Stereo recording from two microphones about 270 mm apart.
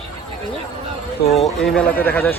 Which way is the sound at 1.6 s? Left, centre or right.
Centre.